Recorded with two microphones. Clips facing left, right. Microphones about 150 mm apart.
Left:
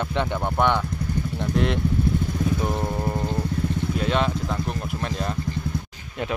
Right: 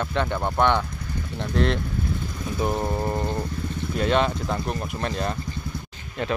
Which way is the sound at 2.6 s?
10° right (ahead or behind).